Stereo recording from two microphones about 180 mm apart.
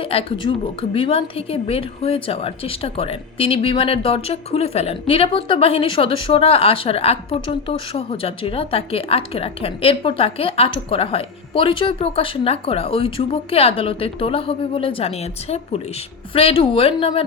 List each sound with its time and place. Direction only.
0.0 s a woman's voice: 30° left (ahead or behind)